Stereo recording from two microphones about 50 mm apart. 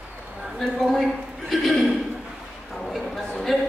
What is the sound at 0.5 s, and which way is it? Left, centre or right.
A man's voice, centre.